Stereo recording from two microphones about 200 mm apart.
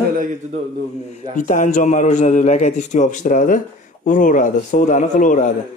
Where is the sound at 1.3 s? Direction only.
40° left (ahead or behind).